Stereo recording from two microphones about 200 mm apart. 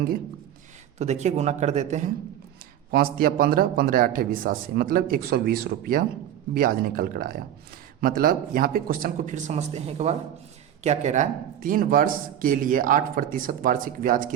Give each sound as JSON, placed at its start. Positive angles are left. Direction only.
{"t": 0.9, "sound": "a man's voice", "side_deg": -35}